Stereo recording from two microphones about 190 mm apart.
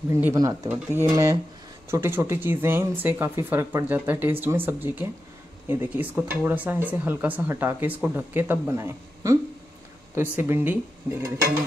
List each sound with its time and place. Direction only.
0.1 s speech: 15° right (ahead or behind)